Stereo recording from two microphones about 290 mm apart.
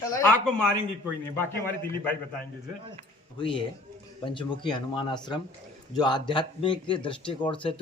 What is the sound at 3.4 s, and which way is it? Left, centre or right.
Speech, centre.